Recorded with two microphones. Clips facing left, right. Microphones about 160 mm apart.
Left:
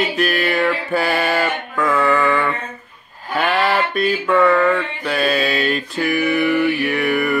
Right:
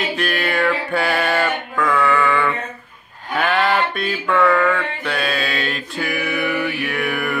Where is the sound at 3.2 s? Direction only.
5° left (ahead or behind).